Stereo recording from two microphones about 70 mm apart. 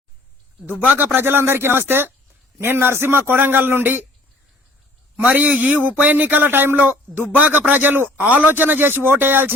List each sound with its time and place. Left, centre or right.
0.9 s a man's voice: right
5.1 s a man's voice: right